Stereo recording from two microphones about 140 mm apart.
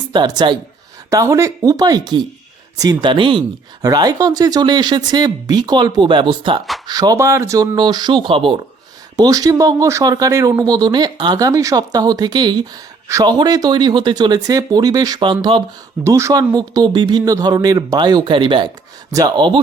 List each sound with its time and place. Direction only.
0.1 s speech: 30° right (ahead or behind)
1.1 s speech: 20° right (ahead or behind); by 8.6 s 40° right (ahead or behind)
9.1 s speech: 25° right (ahead or behind)
16.0 s speech: 20° right (ahead or behind)